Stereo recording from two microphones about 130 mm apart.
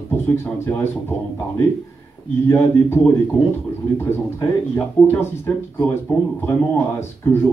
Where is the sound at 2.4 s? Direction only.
20° left (ahead or behind).